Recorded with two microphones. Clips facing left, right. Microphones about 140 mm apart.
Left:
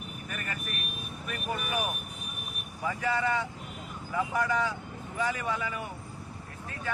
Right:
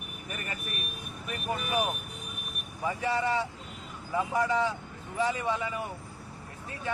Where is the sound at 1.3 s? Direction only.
25° right (ahead or behind).